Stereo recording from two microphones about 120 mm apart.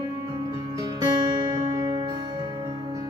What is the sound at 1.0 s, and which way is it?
Guitar, 45° right (ahead or behind).